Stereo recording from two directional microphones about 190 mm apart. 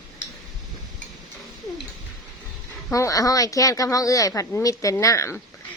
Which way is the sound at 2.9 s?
15° left (ahead or behind).